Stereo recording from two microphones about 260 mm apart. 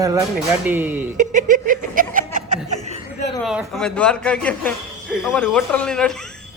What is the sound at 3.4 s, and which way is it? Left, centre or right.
Speech, centre.